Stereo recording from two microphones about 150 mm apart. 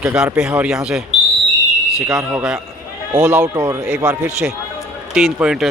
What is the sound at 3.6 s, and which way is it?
Speech, 20° right (ahead or behind).